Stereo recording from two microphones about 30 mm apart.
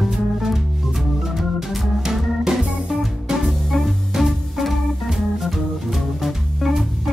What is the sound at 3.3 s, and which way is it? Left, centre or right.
Music, right.